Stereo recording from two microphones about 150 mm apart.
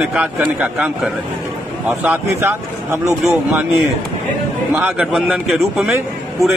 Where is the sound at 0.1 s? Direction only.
10° right (ahead or behind).